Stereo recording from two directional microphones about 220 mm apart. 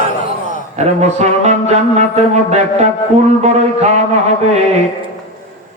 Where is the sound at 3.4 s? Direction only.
30° right (ahead or behind).